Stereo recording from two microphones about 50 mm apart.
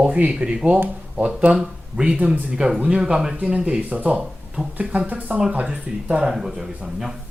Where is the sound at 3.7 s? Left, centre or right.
Right.